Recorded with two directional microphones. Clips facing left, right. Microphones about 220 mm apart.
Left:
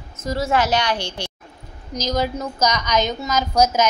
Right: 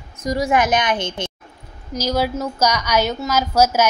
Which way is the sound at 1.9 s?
10° right (ahead or behind).